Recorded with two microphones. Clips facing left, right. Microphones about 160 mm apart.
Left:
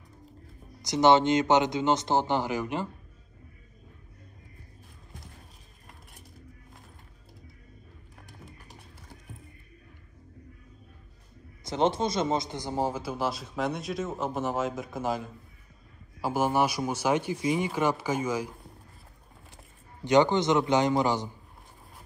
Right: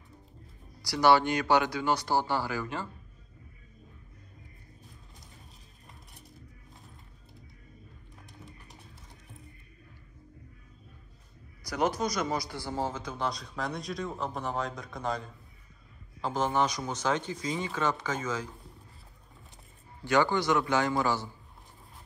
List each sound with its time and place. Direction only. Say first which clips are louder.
0.8 s speech: left 3 dB; 20° left (ahead or behind)
11.6 s a man's voice: left 3 dB; 25° left (ahead or behind)
20.1 s speech: left 4 dB; 20° left (ahead or behind)